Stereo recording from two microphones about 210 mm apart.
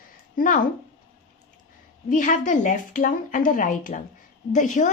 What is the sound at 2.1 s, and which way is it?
Speech, 40° left (ahead or behind).